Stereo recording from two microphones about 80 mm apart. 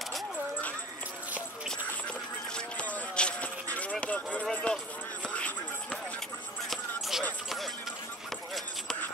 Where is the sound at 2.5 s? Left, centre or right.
Centre.